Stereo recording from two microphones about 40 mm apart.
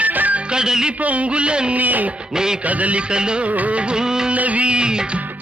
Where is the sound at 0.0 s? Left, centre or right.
Right.